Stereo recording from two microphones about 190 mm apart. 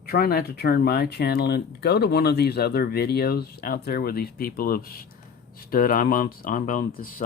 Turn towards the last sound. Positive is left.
turn(degrees=50)  # may be behind; listen again after turning